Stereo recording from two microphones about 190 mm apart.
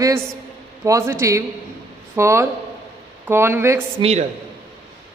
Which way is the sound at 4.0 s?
35° right (ahead or behind).